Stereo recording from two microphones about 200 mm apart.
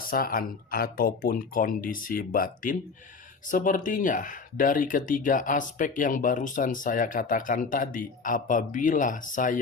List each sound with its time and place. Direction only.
0.1 s speech: 45° left (ahead or behind)